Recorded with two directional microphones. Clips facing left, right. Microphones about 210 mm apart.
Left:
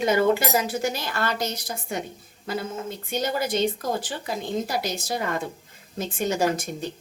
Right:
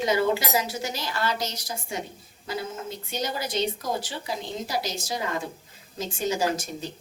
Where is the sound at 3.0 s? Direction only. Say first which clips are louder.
Left 5 dB; 55° left (ahead or behind).